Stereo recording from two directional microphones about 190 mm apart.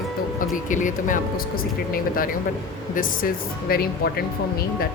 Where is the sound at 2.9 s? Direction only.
45° left (ahead or behind).